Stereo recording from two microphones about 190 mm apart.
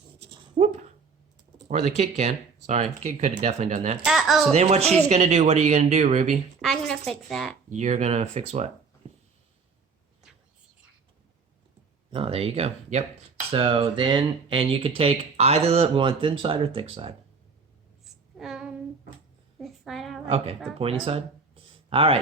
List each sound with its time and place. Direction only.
0.3 s dog: 30° right (ahead or behind)
1.6 s speech: 35° right (ahead or behind)
4.0 s speech: centre (ahead or behind)
4.5 s speech: 35° right (ahead or behind)
6.6 s a woman's voice: 5° left (ahead or behind)
7.7 s speech: 40° right (ahead or behind)
12.1 s speech: 30° right (ahead or behind)
18.3 s child singing: 5° right (ahead or behind)
19.6 s a sound: centre (ahead or behind)
20.2 s speech: 30° right (ahead or behind)